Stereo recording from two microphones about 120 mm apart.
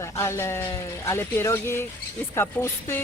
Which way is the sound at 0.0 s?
25° left (ahead or behind).